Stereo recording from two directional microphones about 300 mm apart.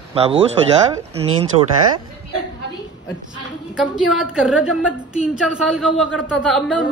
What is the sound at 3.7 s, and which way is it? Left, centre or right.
A woman's voice, centre.